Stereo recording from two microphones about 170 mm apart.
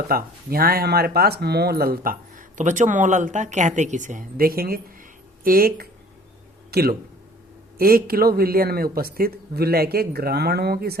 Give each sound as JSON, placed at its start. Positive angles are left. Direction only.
{"t": 0.1, "sound": "speech", "side_deg": -60}